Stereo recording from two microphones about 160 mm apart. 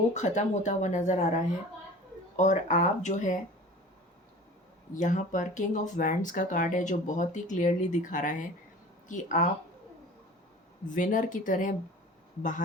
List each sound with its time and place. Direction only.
0.1 s speech: 50° left (ahead or behind)
4.9 s speech: 50° left (ahead or behind)
10.8 s speech: 55° left (ahead or behind)